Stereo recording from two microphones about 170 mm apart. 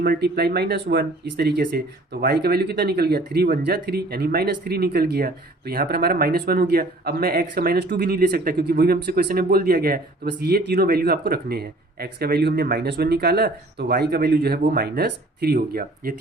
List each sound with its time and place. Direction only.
0.0 s speech: 65° right (ahead or behind)